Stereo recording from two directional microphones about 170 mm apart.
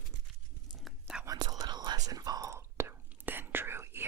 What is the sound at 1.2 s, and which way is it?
Whispering, 20° right (ahead or behind).